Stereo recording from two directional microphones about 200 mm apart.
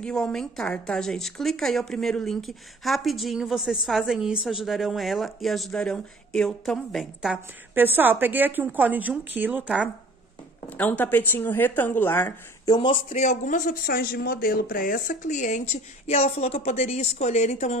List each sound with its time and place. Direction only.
0.0 s speech: 5° left (ahead or behind)
10.7 s a woman's voice: 10° left (ahead or behind); by 17.7 s 35° left (ahead or behind)